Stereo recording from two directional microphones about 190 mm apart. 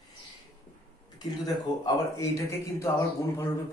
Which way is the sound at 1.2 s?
20° left (ahead or behind).